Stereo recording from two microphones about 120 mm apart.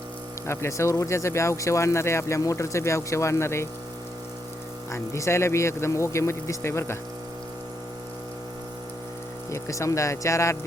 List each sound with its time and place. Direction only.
0.4 s speech: 20° left (ahead or behind)
4.9 s speech: 25° left (ahead or behind)
9.5 s speech: 25° left (ahead or behind)